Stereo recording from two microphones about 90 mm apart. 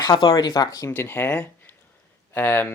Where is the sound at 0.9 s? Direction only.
25° left (ahead or behind).